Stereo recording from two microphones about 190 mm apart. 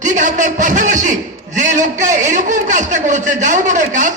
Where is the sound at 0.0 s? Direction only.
40° right (ahead or behind).